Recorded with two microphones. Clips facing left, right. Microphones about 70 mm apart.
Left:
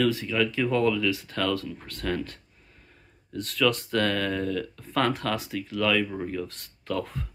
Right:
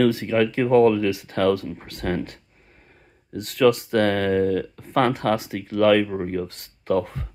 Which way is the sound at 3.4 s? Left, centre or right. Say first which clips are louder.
Right 7 dB; right.